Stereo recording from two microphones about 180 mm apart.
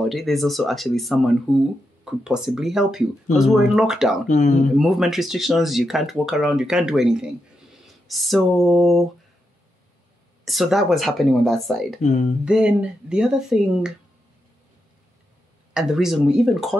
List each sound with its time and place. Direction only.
0.0 s speech: centre (ahead or behind)
4.3 s speech: 40° left (ahead or behind)
4.7 s speech: centre (ahead or behind)
10.4 s speech: centre (ahead or behind)
12.0 s speech: 40° left (ahead or behind)
12.4 s speech: 5° right (ahead or behind)
15.7 s speech: 5° right (ahead or behind)